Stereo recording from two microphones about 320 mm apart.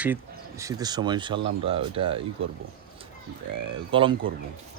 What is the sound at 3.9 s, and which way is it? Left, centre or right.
Speech, centre.